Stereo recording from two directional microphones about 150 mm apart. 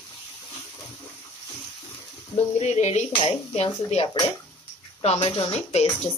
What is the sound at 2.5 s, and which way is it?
Speech, 50° left (ahead or behind).